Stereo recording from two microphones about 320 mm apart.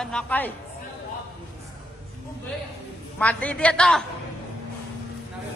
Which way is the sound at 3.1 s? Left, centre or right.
Centre.